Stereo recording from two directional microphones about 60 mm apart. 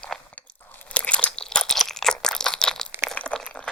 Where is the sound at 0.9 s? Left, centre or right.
Centre.